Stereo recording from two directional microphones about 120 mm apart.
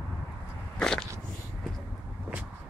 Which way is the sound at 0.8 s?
5° left (ahead or behind).